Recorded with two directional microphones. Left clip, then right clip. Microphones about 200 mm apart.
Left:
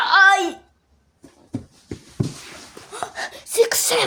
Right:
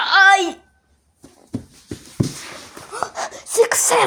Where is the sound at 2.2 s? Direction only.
45° right (ahead or behind).